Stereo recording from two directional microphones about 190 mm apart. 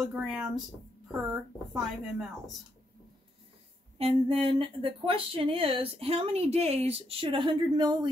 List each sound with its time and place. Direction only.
0.0 s a woman's voice: 5° right (ahead or behind)
1.7 s a woman's voice: 5° right (ahead or behind)
4.0 s speech: 30° right (ahead or behind)